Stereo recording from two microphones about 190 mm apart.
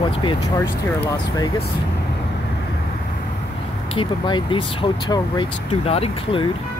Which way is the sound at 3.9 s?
25° left (ahead or behind).